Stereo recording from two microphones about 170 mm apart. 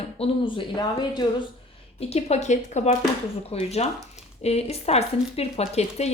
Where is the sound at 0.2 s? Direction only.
30° left (ahead or behind).